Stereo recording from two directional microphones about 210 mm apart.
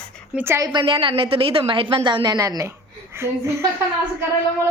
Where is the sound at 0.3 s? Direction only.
10° right (ahead or behind).